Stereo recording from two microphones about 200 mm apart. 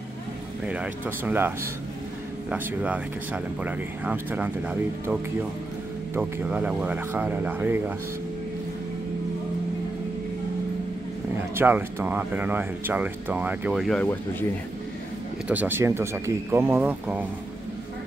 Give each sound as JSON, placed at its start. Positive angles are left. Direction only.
{"t": 0.7, "sound": "speech", "side_deg": -5}
{"t": 2.5, "sound": "speech", "side_deg": -5}
{"t": 11.5, "sound": "speech", "side_deg": -10}
{"t": 15.4, "sound": "speech", "side_deg": -10}